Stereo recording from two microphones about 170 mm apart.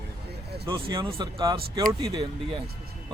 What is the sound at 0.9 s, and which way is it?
Speech, 25° right (ahead or behind).